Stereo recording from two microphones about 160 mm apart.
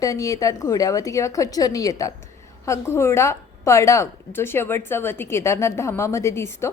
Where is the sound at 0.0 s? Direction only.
20° left (ahead or behind).